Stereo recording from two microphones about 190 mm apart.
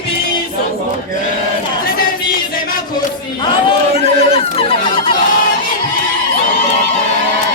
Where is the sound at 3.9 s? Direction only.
30° left (ahead or behind).